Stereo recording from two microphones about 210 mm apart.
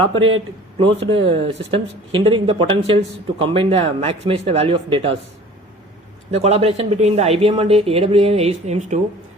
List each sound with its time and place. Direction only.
0.0 s speech: 25° right (ahead or behind)
6.3 s speech: 30° right (ahead or behind)